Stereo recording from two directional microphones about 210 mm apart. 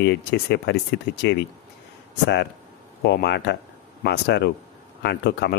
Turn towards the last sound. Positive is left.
turn(degrees=50)  # may be behind; listen again after turning